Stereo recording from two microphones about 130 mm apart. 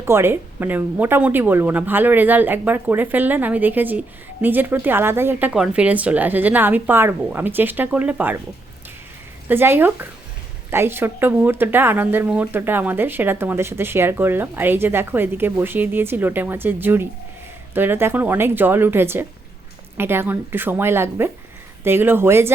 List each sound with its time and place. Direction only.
0.0 s speech: 20° right (ahead or behind)
9.5 s speech: 15° right (ahead or behind)